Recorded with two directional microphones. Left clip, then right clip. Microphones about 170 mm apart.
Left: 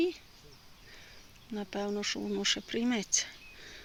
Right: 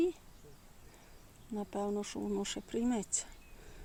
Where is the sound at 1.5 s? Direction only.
5° right (ahead or behind).